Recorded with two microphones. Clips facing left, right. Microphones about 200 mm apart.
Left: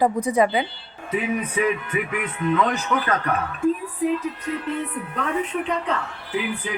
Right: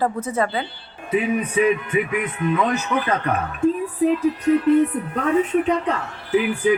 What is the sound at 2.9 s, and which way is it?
Speech, 10° right (ahead or behind).